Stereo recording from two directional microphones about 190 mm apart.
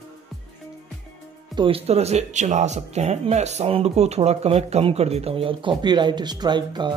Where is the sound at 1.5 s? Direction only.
25° right (ahead or behind).